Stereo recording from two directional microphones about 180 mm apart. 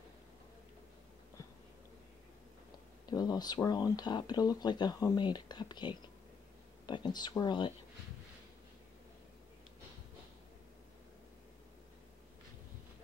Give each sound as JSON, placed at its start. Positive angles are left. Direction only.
{"t": 3.1, "sound": "speech", "side_deg": 20}